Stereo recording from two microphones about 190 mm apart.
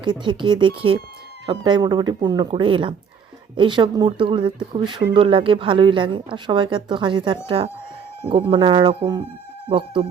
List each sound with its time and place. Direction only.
0.0 s speech: 25° right (ahead or behind)